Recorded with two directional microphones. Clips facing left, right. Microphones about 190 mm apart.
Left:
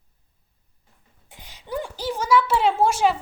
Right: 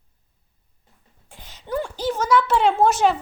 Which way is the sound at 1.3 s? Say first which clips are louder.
Right 2 dB; 15° left (ahead or behind).